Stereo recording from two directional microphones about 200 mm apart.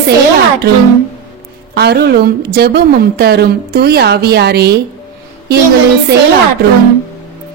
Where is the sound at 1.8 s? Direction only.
55° right (ahead or behind).